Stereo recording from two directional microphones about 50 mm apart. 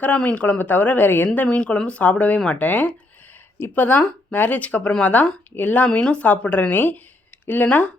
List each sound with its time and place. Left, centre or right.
0.2 s speech: left
1.4 s speech: left
6.2 s speech: left